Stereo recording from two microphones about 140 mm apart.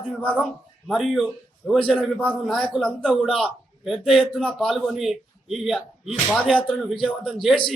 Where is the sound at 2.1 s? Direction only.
10° left (ahead or behind).